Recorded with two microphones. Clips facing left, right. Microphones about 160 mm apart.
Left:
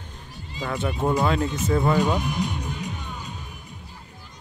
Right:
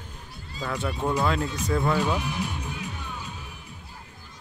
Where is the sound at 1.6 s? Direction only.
Centre (ahead or behind).